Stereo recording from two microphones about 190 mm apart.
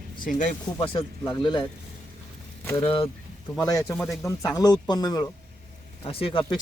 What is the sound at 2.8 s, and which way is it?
Speech, 30° left (ahead or behind).